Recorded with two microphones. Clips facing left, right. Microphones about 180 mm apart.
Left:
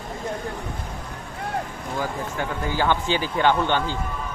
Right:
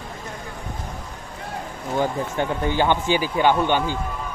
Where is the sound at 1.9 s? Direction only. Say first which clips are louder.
Right 5 dB; 25° right (ahead or behind).